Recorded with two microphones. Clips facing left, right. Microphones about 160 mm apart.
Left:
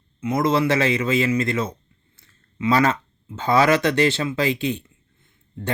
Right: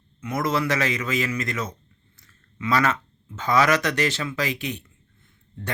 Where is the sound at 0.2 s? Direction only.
25° left (ahead or behind).